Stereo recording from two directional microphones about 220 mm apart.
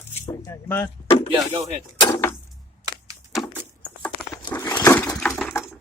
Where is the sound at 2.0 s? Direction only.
15° left (ahead or behind).